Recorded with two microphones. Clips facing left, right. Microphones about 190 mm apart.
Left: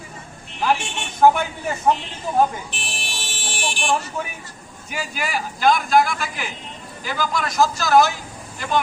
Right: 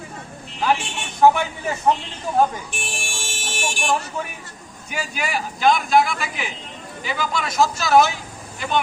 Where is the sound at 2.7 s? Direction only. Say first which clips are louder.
Right 2 dB; 45° right (ahead or behind).